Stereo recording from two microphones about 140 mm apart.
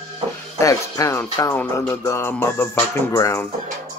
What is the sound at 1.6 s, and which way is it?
Music, 15° left (ahead or behind).